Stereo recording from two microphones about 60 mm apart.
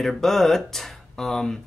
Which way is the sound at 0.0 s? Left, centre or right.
Centre.